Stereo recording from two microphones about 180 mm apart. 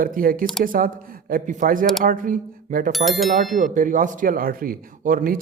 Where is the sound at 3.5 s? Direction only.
45° right (ahead or behind).